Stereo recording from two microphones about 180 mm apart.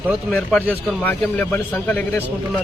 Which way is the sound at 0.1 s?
Centre (ahead or behind).